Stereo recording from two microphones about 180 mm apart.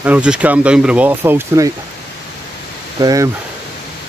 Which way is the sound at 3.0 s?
20° right (ahead or behind).